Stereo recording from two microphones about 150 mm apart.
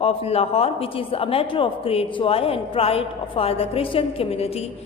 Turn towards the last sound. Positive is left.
turn(degrees=40)  # may be behind; listen again after turning